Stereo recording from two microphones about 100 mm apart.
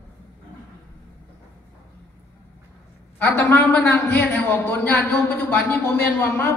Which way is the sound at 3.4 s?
15° left (ahead or behind).